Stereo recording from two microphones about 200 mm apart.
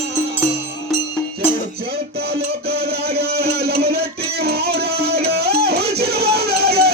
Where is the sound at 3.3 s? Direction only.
50° right (ahead or behind).